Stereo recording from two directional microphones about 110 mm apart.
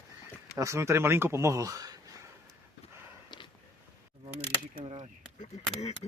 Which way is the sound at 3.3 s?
45° left (ahead or behind).